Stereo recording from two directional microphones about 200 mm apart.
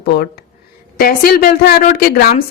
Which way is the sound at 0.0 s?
55° left (ahead or behind).